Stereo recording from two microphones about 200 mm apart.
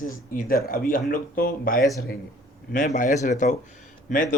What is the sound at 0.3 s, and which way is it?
A man's voice, 45° left (ahead or behind).